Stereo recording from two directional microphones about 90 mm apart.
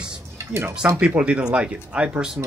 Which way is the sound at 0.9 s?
10° right (ahead or behind).